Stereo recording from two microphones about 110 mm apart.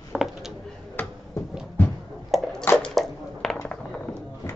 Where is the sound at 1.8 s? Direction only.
20° left (ahead or behind).